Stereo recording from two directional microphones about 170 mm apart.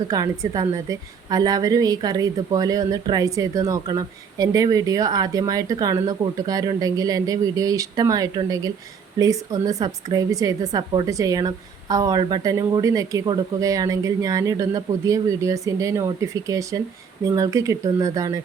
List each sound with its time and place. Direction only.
0.1 s a woman's voice: 20° right (ahead or behind)